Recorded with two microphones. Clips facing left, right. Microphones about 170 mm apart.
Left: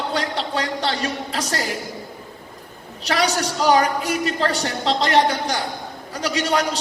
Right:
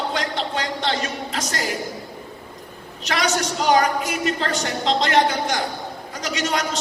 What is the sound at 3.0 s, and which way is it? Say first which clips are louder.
A woman's voice: left 1 dB; 35° left (ahead or behind).